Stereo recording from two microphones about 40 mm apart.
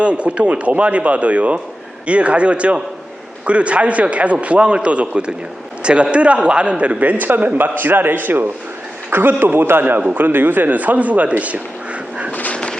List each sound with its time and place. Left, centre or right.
0.0 s a man's voice: right
9.8 s a man's voice: right
12.3 s a sound: left